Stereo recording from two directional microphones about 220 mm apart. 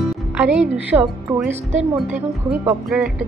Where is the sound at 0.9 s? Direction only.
10° right (ahead or behind).